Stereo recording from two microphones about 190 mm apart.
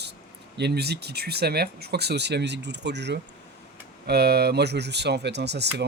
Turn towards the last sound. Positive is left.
turn(degrees=-60)  # may be behind; listen again after turning